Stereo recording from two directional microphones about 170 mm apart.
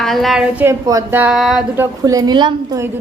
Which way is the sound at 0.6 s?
15° right (ahead or behind).